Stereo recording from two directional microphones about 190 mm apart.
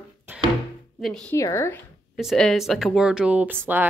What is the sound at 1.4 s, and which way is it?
Speech, 15° left (ahead or behind).